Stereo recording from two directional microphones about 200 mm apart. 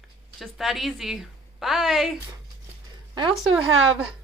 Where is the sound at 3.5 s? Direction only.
85° right.